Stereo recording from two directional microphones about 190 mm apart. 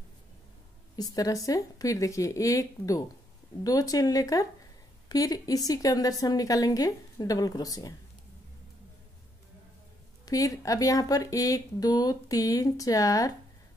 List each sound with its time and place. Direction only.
0.9 s a woman's voice: 20° left (ahead or behind)
10.2 s speech: 20° left (ahead or behind)